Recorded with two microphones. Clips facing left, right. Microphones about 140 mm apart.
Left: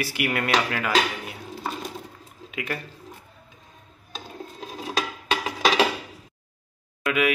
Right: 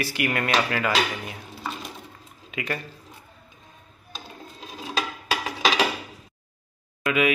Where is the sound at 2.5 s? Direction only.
5° left (ahead or behind).